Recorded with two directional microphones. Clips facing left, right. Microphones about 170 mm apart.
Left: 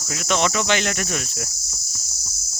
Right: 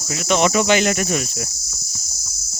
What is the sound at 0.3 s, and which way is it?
Speech, 10° right (ahead or behind).